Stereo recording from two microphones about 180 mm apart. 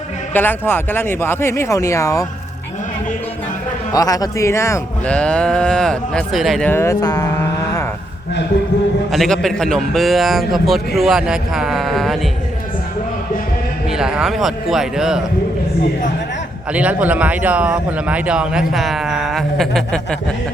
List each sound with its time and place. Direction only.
0.3 s speech: 10° left (ahead or behind)
3.9 s speech: 20° left (ahead or behind); by 6.7 s centre (ahead or behind)
6.7 s speech: 15° left (ahead or behind)
9.1 s speech: centre (ahead or behind)
13.9 s speech: 5° right (ahead or behind)
16.7 s speech: 10° right (ahead or behind)